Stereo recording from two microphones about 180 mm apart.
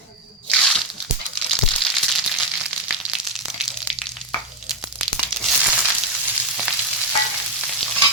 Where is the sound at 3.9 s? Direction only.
Centre (ahead or behind).